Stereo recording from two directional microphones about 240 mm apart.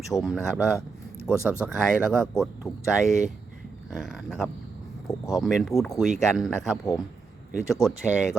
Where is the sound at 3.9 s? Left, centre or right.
Centre.